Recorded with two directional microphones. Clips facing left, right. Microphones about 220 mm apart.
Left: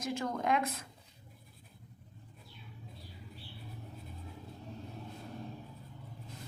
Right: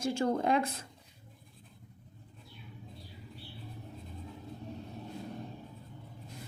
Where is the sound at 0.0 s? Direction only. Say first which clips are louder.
Right 5 dB; 30° right (ahead or behind).